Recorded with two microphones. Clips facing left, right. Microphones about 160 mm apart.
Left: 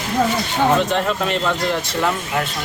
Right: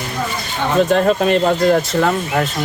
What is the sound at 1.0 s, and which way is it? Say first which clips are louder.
Speech: right 6 dB; 45° right (ahead or behind).